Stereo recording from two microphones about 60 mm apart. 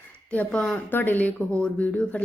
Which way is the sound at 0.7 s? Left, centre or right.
Left.